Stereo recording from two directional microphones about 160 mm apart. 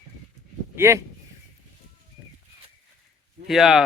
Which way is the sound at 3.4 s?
Centre (ahead or behind).